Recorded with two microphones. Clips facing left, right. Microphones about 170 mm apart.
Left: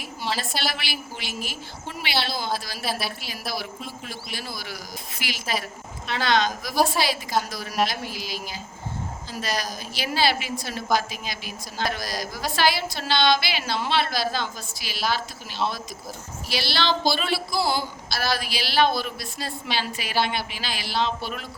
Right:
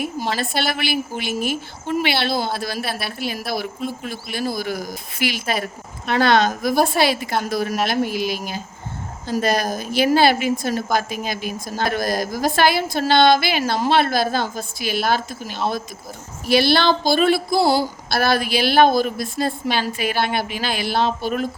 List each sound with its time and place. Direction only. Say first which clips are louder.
0.0 s a woman's voice: right 6 dB; 55° right (ahead or behind)